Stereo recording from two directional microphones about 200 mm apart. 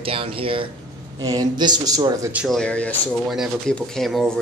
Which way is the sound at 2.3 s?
Centre (ahead or behind).